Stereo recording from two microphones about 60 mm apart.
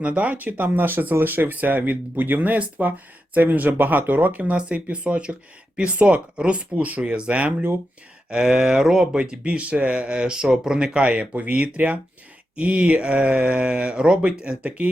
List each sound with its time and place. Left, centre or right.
0.0 s speech: right; by 9.0 s centre
9.1 s speech: centre